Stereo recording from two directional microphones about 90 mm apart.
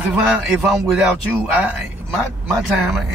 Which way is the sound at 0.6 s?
Centre (ahead or behind).